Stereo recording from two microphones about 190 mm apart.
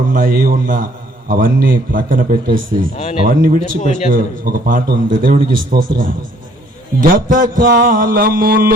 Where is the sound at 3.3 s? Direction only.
45° right (ahead or behind).